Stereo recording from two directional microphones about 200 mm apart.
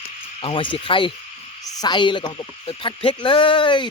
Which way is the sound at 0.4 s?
25° left (ahead or behind).